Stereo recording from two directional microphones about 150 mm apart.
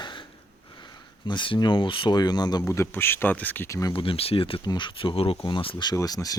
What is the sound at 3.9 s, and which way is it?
Speech, 35° left (ahead or behind).